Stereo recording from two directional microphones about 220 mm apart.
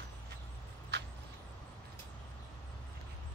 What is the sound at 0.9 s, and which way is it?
Vehicle, 50° right (ahead or behind).